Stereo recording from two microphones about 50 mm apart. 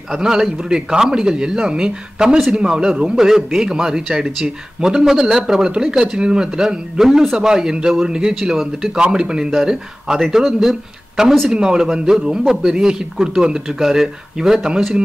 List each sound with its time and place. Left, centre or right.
0.1 s speech: centre
9.0 s speech: centre